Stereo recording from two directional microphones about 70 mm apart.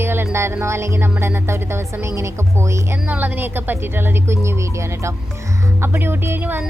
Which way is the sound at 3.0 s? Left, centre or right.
Right.